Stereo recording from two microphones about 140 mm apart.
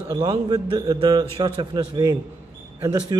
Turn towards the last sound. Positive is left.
turn(degrees=-30)  # may be behind; listen again after turning